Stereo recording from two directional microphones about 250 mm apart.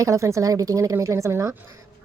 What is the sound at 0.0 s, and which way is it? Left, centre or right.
A woman's voice, centre.